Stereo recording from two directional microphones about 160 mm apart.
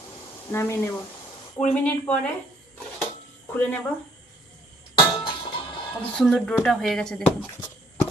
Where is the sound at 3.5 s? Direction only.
10° left (ahead or behind).